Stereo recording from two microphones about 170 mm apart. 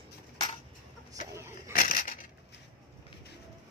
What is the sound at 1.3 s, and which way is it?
Vehicle, 15° right (ahead or behind).